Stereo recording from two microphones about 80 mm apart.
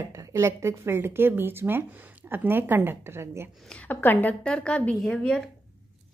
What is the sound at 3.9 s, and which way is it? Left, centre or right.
A woman's voice, left.